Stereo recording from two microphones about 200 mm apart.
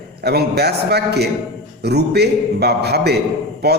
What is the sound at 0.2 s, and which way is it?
A man's voice, 55° right (ahead or behind).